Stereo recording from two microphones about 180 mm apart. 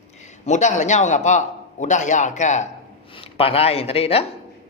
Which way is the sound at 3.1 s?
30° left (ahead or behind).